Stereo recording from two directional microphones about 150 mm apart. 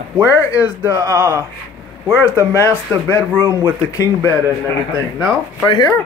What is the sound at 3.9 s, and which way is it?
Speech, 25° left (ahead or behind).